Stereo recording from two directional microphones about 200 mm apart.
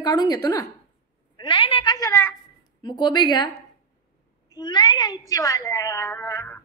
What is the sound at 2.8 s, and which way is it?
Speech, 20° left (ahead or behind).